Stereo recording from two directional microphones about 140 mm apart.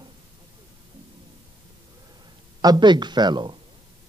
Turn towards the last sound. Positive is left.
turn(degrees=-30)  # may be behind; listen again after turning